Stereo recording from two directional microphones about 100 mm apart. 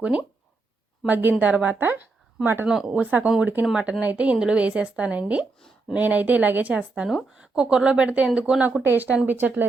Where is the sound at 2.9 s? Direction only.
15° right (ahead or behind).